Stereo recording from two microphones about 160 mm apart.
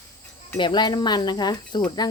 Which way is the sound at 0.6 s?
25° left (ahead or behind).